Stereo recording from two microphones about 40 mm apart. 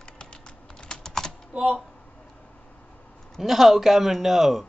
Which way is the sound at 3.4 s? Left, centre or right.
Centre.